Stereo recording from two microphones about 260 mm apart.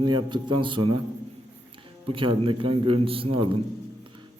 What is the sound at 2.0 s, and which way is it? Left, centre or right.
A man's voice, centre.